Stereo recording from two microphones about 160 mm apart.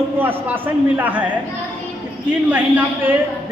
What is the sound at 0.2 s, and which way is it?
A man's voice, 10° right (ahead or behind).